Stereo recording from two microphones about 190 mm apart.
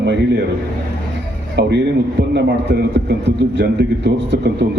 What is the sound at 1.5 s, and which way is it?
A man's voice, 65° right (ahead or behind).